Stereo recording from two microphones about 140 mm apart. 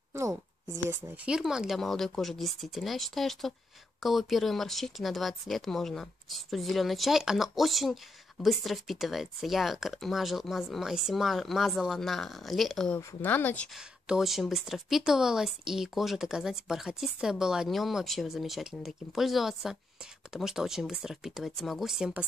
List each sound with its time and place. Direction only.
0.7 s speech: 15° right (ahead or behind)
1.3 s speech: 5° right (ahead or behind); by 13.7 s 10° left (ahead or behind)
13.7 s speech: 5° right (ahead or behind)